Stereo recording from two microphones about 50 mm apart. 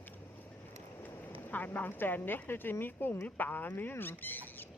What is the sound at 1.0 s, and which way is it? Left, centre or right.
Speech, left.